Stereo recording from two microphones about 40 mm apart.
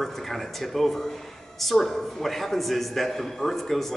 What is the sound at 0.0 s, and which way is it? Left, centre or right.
A man's voice, centre.